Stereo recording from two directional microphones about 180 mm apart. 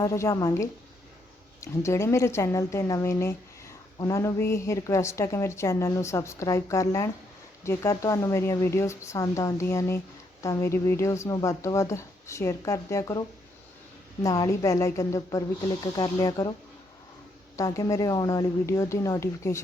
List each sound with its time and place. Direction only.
0.0 s a woman's voice: 15° left (ahead or behind)
17.6 s a woman's voice: 20° left (ahead or behind)